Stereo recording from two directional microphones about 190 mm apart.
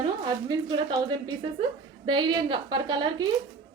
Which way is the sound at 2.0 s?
25° right (ahead or behind).